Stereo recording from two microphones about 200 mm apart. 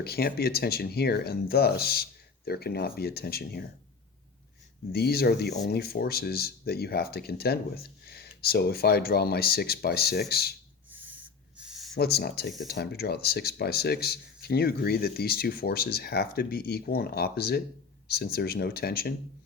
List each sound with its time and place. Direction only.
0.0 s speech: 50° left (ahead or behind)
4.9 s speech: 50° left (ahead or behind)
10.8 s a sound: 10° right (ahead or behind)
11.9 s speech: 50° left (ahead or behind)